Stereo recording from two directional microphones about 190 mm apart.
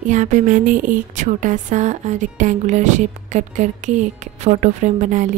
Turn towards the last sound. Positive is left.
turn(degrees=-40)  # may be behind; listen again after turning